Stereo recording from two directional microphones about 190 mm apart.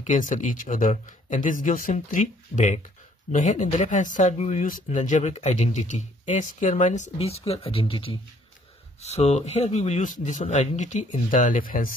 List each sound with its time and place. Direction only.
0.0 s speech: 40° left (ahead or behind)